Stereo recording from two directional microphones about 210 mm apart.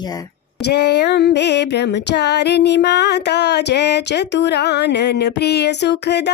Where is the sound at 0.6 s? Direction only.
55° left (ahead or behind).